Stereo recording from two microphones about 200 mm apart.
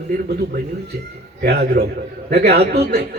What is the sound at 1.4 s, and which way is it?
Speech, 55° right (ahead or behind).